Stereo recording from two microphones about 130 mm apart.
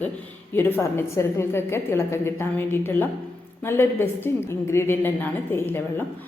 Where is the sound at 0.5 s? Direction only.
15° left (ahead or behind).